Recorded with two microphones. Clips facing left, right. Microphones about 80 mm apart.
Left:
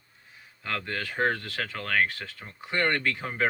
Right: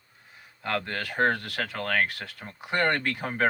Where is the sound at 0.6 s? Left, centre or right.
Right.